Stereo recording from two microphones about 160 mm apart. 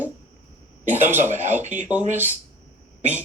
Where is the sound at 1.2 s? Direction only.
45° right (ahead or behind).